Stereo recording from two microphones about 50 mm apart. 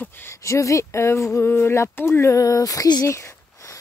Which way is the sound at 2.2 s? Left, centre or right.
Left.